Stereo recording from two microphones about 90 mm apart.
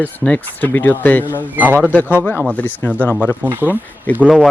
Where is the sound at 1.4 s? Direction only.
20° right (ahead or behind).